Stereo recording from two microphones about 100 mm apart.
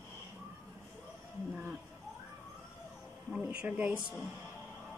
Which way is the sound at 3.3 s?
10° right (ahead or behind).